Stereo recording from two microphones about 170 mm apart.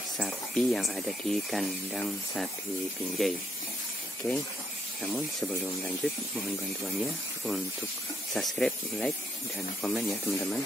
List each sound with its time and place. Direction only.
0.2 s speech: centre (ahead or behind)
4.2 s speech: 15° left (ahead or behind)
6.0 s speech: 5° left (ahead or behind)